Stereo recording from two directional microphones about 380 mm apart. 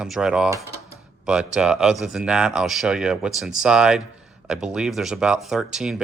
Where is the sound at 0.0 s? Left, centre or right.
Centre.